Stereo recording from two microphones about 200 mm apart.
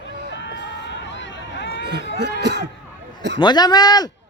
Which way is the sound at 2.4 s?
60° right (ahead or behind).